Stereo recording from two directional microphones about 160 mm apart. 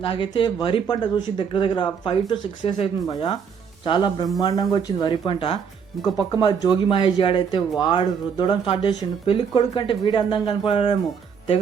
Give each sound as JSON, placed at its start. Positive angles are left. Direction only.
{"t": 0.0, "sound": "speech", "side_deg": 35}